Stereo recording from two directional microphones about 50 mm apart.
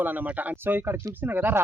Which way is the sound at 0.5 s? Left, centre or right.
Right.